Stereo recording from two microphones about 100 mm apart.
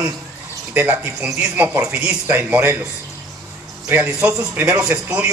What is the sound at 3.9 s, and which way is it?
A man's voice, 15° right (ahead or behind).